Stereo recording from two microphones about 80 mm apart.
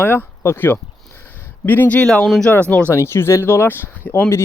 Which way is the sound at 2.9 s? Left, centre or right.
Left.